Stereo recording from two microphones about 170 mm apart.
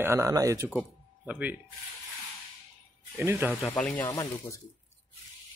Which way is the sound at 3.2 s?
15° right (ahead or behind).